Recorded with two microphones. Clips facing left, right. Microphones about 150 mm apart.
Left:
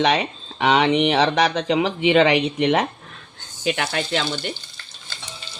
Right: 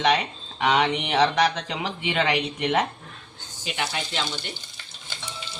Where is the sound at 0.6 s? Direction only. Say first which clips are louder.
Left 5 dB; 90° left.